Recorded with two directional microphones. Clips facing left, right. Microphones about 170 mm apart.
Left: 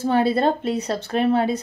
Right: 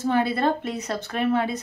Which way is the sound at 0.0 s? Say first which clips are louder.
Left 3 dB; 30° left (ahead or behind).